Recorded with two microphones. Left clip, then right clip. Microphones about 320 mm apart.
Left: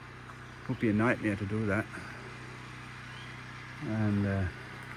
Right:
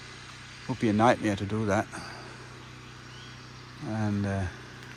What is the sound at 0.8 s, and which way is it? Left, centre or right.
Speech, centre.